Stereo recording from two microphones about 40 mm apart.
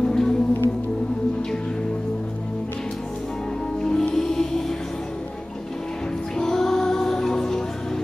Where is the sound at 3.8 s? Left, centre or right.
Centre.